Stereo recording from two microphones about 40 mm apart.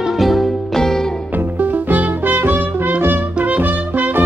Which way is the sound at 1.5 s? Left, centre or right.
Right.